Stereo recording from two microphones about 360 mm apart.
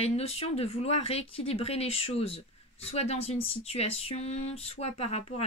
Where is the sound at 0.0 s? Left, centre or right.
Centre.